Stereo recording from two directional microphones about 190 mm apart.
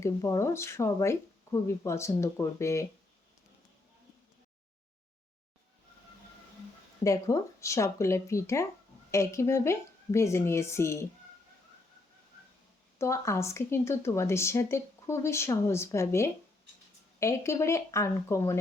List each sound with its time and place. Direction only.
0.0 s speech: 15° left (ahead or behind)
7.0 s speech: 15° left (ahead or behind)
13.0 s speech: 15° left (ahead or behind)